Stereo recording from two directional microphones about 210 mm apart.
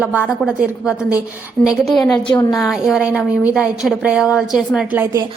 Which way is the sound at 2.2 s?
20° left (ahead or behind).